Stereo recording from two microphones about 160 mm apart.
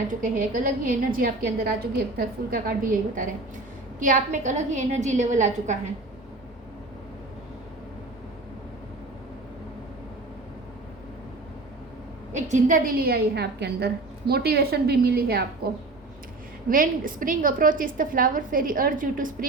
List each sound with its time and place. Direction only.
0.2 s a woman's voice: 60° right (ahead or behind)
4.0 s a woman's voice: 55° right (ahead or behind)
12.3 s a woman's voice: 50° right (ahead or behind); by 15.4 s 75° right (ahead or behind)
16.6 s a woman's voice: 60° right (ahead or behind)